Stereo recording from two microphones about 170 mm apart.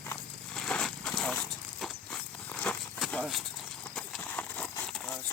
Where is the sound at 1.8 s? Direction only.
5° left (ahead or behind).